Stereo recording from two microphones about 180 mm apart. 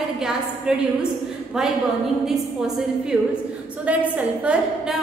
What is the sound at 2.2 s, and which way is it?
A woman's voice, centre (ahead or behind).